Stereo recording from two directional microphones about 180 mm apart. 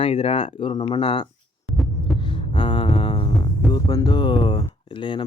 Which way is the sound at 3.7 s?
25° left (ahead or behind).